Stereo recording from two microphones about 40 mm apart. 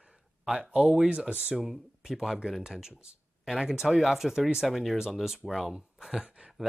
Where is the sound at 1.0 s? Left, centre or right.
Right.